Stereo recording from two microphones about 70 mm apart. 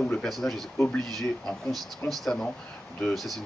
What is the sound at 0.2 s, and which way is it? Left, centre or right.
Speech, centre.